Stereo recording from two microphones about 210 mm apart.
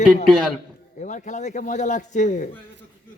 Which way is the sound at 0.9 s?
35° left (ahead or behind).